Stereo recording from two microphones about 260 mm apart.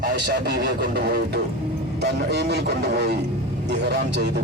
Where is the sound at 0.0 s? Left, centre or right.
Right.